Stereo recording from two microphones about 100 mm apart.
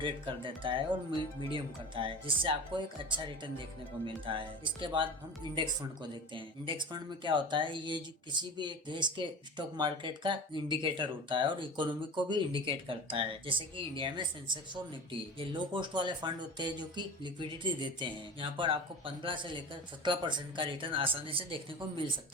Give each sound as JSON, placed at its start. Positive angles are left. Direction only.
{"t": 0.0, "sound": "speech", "side_deg": -60}